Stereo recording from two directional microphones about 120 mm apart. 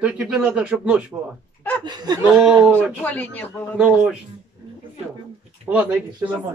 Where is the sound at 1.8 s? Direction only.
35° right (ahead or behind).